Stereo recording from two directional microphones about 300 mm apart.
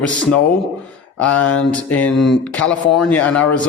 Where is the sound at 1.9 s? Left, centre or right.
Centre.